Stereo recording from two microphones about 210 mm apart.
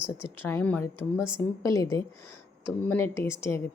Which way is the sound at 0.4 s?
10° left (ahead or behind).